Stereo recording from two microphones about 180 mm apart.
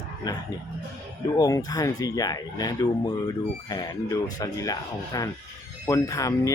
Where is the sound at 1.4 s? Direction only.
20° left (ahead or behind).